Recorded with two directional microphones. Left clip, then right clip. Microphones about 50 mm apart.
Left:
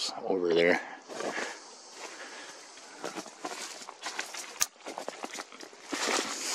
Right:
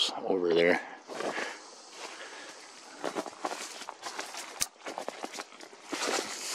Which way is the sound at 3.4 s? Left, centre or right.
Centre.